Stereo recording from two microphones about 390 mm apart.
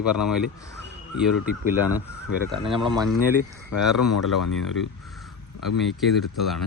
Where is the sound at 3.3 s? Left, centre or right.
Left.